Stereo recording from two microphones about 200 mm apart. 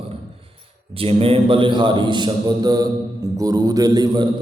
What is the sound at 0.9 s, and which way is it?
A man's voice, 30° right (ahead or behind).